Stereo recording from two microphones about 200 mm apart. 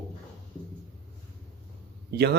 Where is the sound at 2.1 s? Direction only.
55° right (ahead or behind).